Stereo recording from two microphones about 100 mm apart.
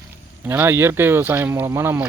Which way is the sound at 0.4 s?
20° right (ahead or behind).